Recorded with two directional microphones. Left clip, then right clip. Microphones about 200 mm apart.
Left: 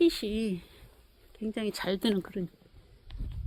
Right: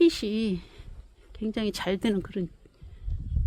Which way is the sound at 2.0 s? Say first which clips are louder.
Right 1 dB; 10° right (ahead or behind).